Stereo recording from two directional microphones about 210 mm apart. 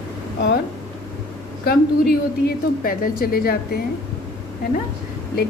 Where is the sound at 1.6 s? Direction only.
45° left (ahead or behind).